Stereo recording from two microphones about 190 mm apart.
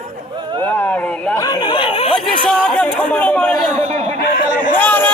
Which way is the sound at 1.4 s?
20° left (ahead or behind).